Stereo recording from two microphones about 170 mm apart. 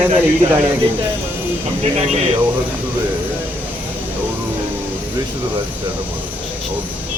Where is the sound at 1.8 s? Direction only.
40° right (ahead or behind).